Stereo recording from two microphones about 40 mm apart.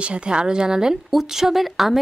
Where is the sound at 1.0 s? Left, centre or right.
Centre.